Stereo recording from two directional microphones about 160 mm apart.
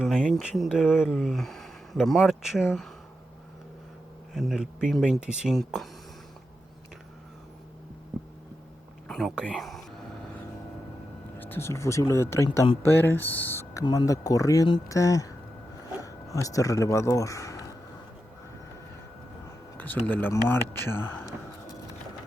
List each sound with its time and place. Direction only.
0.0 s speech: 5° right (ahead or behind)
4.4 s speech: centre (ahead or behind)
9.0 s a sound: 5° left (ahead or behind)
9.3 s speech: 5° right (ahead or behind)
11.3 s speech: 15° left (ahead or behind)
19.7 s speech: 10° left (ahead or behind)